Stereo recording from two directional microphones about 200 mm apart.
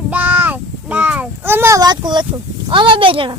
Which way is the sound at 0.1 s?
10° right (ahead or behind).